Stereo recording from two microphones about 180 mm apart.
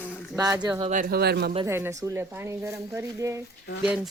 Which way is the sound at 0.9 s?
55° right (ahead or behind).